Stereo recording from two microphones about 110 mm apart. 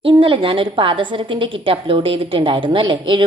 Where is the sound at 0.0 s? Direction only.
50° right (ahead or behind).